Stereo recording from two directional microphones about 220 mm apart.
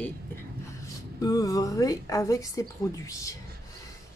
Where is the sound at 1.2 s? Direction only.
15° left (ahead or behind).